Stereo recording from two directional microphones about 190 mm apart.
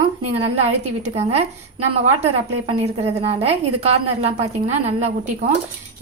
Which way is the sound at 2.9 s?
35° right (ahead or behind).